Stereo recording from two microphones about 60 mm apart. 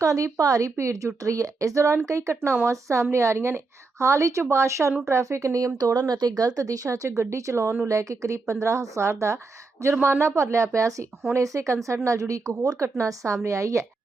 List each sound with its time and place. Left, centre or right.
0.0 s a woman's voice: right
7.2 s a woman's voice: right